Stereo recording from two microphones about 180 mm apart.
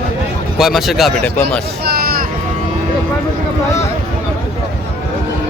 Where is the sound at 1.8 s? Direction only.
60° right (ahead or behind).